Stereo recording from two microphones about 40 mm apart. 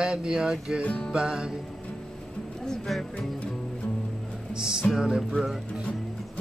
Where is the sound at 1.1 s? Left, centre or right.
Centre.